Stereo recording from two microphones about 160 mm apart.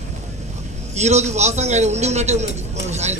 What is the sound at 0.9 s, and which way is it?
Speech, 45° right (ahead or behind).